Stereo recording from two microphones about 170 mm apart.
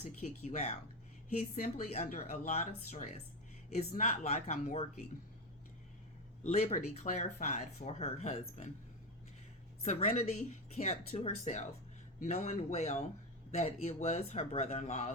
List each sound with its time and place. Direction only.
0.0 s a woman's voice: 40° left (ahead or behind)
2.5 s speech: 40° left (ahead or behind)
6.4 s speech: 40° left (ahead or behind)
9.8 s speech: 40° left (ahead or behind)